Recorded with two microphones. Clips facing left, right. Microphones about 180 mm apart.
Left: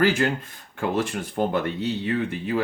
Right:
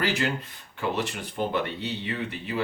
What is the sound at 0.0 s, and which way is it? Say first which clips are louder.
Speech: left 6 dB; 50° left (ahead or behind).